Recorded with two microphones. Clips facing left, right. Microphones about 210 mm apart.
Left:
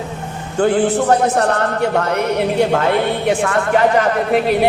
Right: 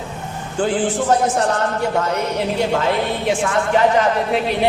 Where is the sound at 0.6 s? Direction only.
60° left (ahead or behind).